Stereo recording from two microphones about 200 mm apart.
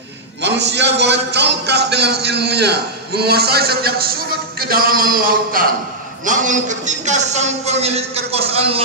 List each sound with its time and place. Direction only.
0.4 s a man's voice: 60° right (ahead or behind); by 8.8 s 30° right (ahead or behind)